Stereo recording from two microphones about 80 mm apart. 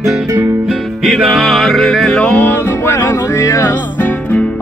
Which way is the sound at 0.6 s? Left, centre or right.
Centre.